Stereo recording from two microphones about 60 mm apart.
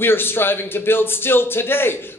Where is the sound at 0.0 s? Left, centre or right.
Left.